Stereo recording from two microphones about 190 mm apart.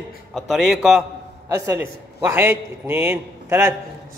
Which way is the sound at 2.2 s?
10° right (ahead or behind).